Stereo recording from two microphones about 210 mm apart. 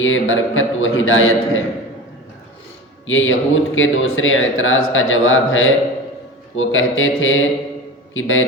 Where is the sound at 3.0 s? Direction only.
70° left (ahead or behind).